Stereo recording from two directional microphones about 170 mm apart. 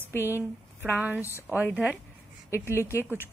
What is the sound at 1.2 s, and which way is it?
Speech, 15° left (ahead or behind).